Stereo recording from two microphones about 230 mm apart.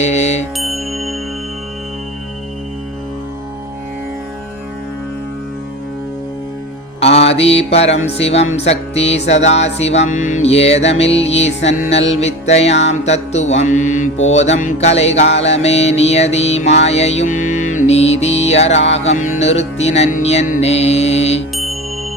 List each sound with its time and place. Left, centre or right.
0.0 s music: left
0.5 s music: centre
7.1 s music: left
8.5 s mantra: left
11.9 s music: left
12.2 s mantra: left
17.5 s music: left
18.9 s mantra: left
21.5 s music: centre